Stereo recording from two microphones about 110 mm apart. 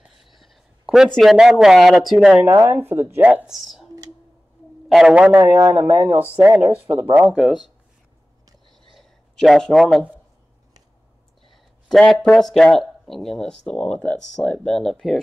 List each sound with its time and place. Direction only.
0.0 s a sound: centre (ahead or behind)
1.1 s speech: 5° right (ahead or behind)
2.6 s speech: 20° right (ahead or behind)
3.4 s a man's voice: centre (ahead or behind); by 7.1 s 20° right (ahead or behind)
7.2 s speech: 5° right (ahead or behind)
8.9 s a sound: centre (ahead or behind)
11.5 s speech: centre (ahead or behind)